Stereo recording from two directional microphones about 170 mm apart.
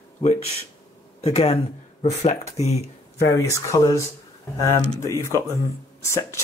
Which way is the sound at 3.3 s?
20° left (ahead or behind).